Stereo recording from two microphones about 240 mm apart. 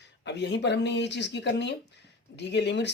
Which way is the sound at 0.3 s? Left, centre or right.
Left.